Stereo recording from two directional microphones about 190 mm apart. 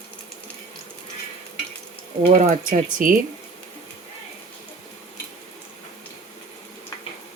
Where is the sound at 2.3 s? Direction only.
40° right (ahead or behind).